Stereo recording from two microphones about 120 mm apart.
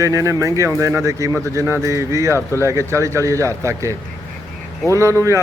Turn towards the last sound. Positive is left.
turn(degrees=-25)  # may be behind; listen again after turning